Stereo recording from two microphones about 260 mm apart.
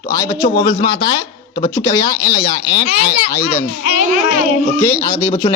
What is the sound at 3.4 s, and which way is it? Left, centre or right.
Speech, left.